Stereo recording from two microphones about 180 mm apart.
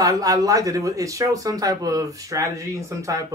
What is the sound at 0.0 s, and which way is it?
Speech, 20° right (ahead or behind).